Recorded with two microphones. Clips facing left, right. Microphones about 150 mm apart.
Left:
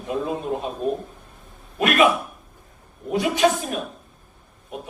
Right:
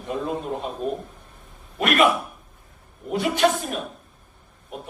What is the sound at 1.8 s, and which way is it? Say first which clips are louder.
Speech: left 1 dB; 5° left (ahead or behind).